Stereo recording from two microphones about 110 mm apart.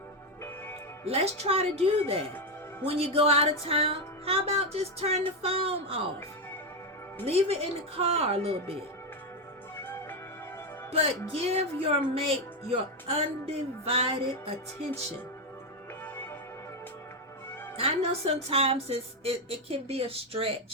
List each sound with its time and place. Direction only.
1.0 s speech: 70° right (ahead or behind)
7.3 s speech: 60° right (ahead or behind)
9.7 s music: 20° left (ahead or behind)
10.9 s speech: 65° right (ahead or behind)
17.7 s speech: 65° right (ahead or behind)